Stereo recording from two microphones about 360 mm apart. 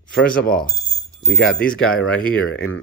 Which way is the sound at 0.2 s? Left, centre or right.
Left.